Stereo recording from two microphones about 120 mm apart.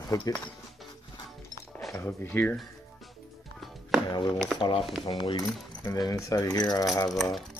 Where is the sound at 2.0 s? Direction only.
20° left (ahead or behind).